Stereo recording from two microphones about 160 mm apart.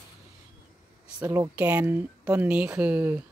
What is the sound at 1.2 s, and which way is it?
A woman's voice, 15° right (ahead or behind).